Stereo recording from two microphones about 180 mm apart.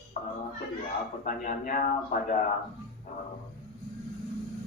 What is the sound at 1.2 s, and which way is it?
Speech, 45° left (ahead or behind).